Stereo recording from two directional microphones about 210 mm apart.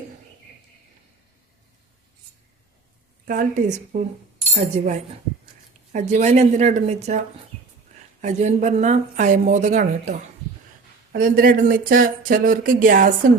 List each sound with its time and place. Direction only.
3.2 s speech: 40° right (ahead or behind)
8.2 s speech: 35° right (ahead or behind)